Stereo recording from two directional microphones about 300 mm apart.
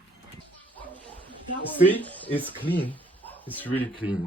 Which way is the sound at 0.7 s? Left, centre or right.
Centre.